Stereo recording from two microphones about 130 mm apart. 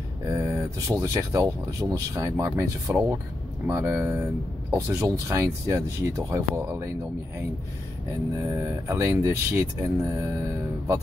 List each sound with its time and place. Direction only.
0.3 s speech: 20° right (ahead or behind)
8.4 s speech: 20° right (ahead or behind)